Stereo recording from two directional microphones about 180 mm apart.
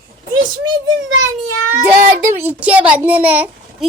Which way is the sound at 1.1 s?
90° right.